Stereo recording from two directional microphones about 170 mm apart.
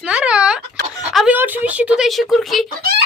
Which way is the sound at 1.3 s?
10° right (ahead or behind).